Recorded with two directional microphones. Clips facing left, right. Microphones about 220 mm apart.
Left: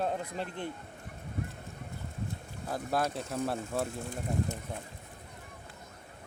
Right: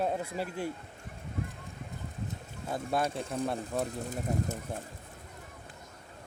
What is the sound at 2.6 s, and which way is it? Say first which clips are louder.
Speech: right 1 dB; centre (ahead or behind).